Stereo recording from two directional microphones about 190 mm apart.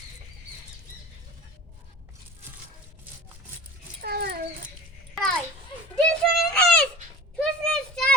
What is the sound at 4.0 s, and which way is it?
Dog, 55° right (ahead or behind).